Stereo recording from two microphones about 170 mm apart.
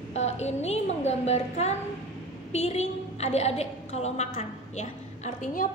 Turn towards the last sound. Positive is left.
turn(degrees=50)  # may be behind; listen again after turning